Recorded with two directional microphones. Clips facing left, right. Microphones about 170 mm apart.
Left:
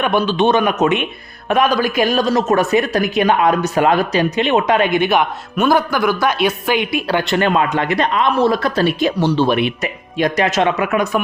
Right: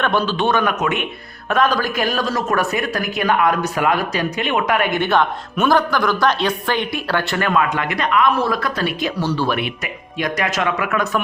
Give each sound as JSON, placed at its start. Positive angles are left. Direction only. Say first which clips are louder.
{"t": 0.0, "sound": "speech", "louder": "left 3 dB", "side_deg": 15}